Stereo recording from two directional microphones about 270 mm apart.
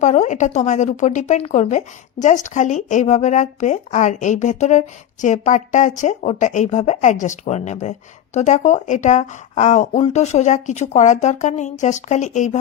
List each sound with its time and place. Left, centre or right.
0.0 s a woman's voice: left